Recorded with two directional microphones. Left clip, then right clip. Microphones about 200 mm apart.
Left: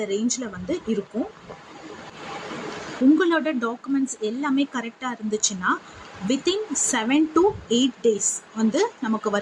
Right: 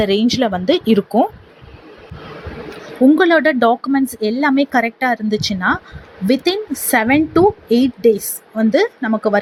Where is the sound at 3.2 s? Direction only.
30° right (ahead or behind).